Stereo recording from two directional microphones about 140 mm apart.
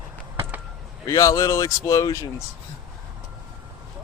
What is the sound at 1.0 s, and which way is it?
Speech, 25° left (ahead or behind).